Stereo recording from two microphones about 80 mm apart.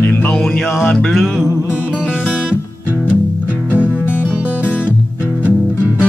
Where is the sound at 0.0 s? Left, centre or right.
Left.